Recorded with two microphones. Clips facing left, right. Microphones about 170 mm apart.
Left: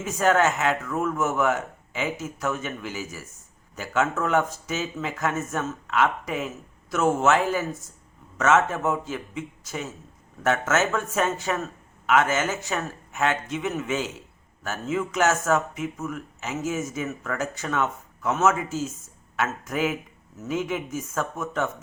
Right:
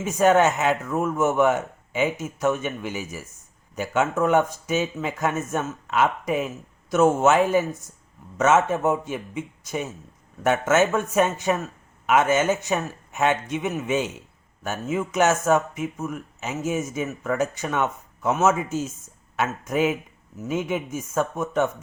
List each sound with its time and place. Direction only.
0.0 s speech: 20° right (ahead or behind)